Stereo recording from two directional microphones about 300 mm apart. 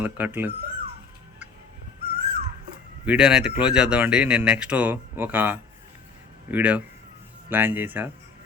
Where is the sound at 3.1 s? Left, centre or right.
Centre.